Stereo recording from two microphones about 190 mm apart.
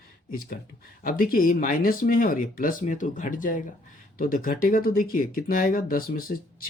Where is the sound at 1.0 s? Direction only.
50° left (ahead or behind).